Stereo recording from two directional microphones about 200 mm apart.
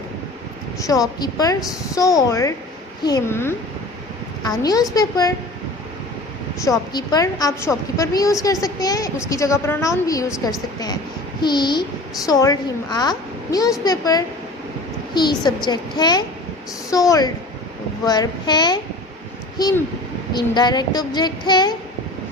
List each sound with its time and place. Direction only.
0.8 s a woman's voice: 15° left (ahead or behind)
6.6 s a woman's voice: 20° left (ahead or behind)